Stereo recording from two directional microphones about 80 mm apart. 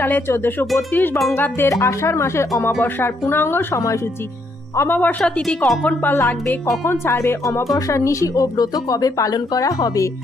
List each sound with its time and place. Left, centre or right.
0.0 s speech: left
1.7 s speech: left
4.8 s speech: left